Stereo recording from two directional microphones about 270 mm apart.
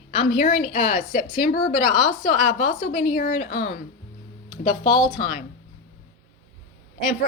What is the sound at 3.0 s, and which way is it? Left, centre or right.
Speech, left.